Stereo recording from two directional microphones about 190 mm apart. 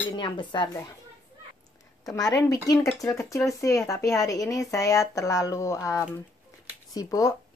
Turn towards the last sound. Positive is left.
turn(degrees=20)  # may be behind; listen again after turning